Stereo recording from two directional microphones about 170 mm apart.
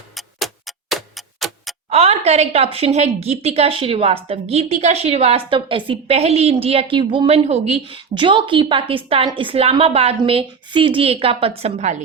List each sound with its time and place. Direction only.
0.3 s tick-tock: centre (ahead or behind)
1.9 s a woman's voice: 35° right (ahead or behind)